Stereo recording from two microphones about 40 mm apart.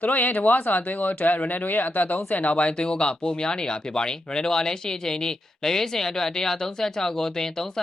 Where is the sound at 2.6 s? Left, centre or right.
Left.